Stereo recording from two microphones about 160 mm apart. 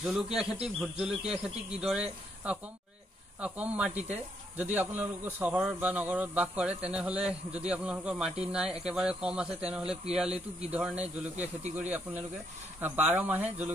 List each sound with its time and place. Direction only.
0.0 s a man's voice: centre (ahead or behind)